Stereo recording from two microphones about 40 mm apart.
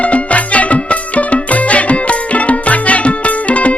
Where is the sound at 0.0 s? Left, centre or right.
Left.